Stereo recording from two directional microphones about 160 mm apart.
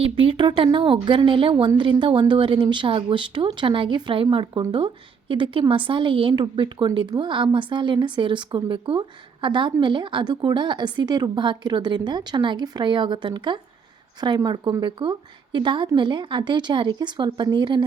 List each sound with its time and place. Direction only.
0.0 s a woman's voice: 35° right (ahead or behind)